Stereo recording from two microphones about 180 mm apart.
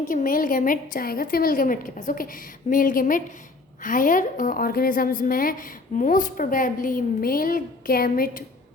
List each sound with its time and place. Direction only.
0.0 s a woman's voice: 50° left (ahead or behind)